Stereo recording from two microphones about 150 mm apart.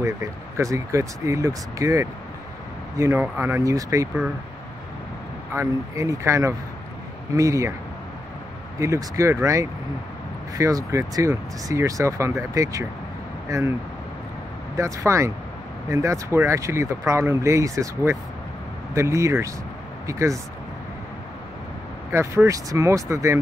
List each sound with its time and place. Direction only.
0.0 s speech: 20° right (ahead or behind)
5.5 s speech: 20° right (ahead or behind)
8.7 s speech: 20° right (ahead or behind)
14.8 s speech: 20° right (ahead or behind)
22.1 s speech: 20° right (ahead or behind)